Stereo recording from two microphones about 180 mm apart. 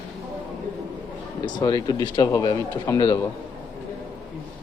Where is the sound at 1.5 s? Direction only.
20° left (ahead or behind).